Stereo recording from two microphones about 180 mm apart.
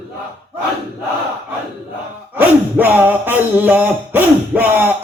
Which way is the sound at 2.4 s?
10° right (ahead or behind).